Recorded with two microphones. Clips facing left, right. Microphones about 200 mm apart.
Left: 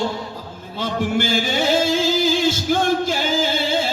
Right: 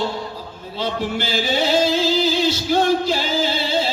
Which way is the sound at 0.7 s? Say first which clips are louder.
Left 2 dB; 50° left (ahead or behind).